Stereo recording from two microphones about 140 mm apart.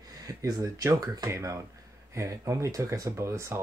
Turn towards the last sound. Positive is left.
turn(degrees=-20)  # may be behind; listen again after turning